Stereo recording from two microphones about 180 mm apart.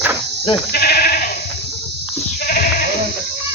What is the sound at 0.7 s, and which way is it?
Sheep, 60° left (ahead or behind).